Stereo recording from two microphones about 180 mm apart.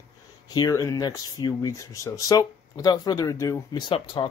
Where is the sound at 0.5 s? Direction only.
20° left (ahead or behind).